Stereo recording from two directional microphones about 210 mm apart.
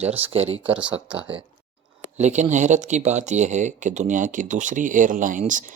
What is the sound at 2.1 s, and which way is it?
Speech, 35° right (ahead or behind).